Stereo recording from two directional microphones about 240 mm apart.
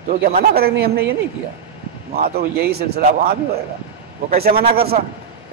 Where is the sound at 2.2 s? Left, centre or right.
Right.